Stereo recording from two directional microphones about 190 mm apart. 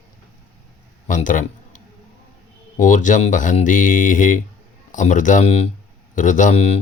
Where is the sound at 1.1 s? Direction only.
45° left (ahead or behind).